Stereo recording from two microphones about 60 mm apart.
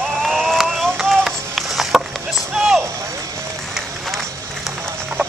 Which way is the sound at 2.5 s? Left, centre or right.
Centre.